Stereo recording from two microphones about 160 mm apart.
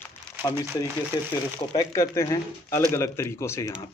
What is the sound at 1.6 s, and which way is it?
Speech, 30° left (ahead or behind).